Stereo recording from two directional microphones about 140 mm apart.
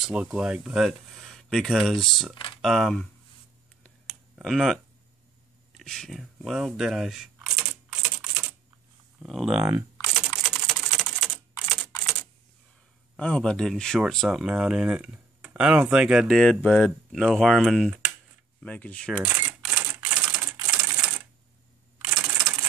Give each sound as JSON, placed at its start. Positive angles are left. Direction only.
{"t": 0.0, "sound": "speech", "side_deg": -5}
{"t": 2.3, "sound": "a sound", "side_deg": 35}
{"t": 2.6, "sound": "speech", "side_deg": 0}
{"t": 4.1, "sound": "tick", "side_deg": 0}
{"t": 5.8, "sound": "speech", "side_deg": 5}
{"t": 7.4, "sound": "typing", "side_deg": -15}
{"t": 9.2, "sound": "speech", "side_deg": 0}
{"t": 10.4, "sound": "typing", "side_deg": -5}
{"t": 13.2, "sound": "speech", "side_deg": 10}
{"t": 16.3, "sound": "speech", "side_deg": 5}
{"t": 18.6, "sound": "speech", "side_deg": 10}
{"t": 19.2, "sound": "typewriter", "side_deg": -10}
{"t": 22.1, "sound": "a sound", "side_deg": -10}